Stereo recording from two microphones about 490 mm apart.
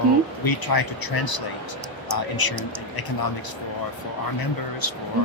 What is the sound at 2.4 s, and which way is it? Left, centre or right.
Speech, left.